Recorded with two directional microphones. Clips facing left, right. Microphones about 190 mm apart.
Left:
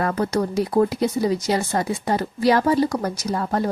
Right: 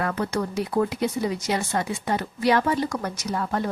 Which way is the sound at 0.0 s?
40° left (ahead or behind).